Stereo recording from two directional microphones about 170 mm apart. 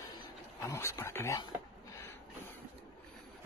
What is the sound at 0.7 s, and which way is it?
Speech, 15° left (ahead or behind).